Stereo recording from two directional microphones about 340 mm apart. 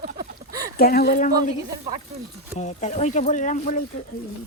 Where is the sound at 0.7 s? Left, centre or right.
Left.